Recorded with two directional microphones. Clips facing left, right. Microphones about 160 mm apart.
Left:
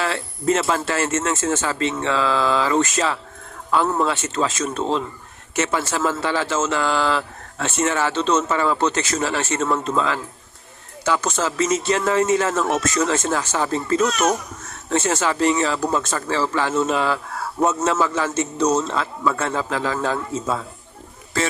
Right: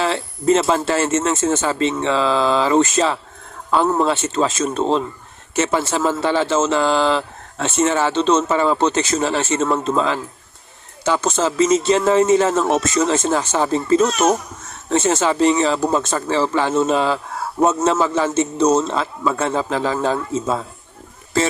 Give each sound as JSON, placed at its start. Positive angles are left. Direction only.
{"t": 0.0, "sound": "speech", "side_deg": -25}